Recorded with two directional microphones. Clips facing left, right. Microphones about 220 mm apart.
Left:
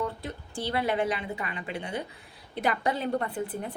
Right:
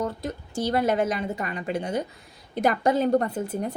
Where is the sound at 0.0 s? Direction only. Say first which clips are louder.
Right 4 dB; 40° right (ahead or behind).